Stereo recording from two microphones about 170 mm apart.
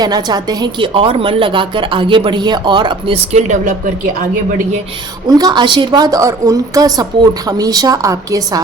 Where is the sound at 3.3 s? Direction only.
45° right (ahead or behind).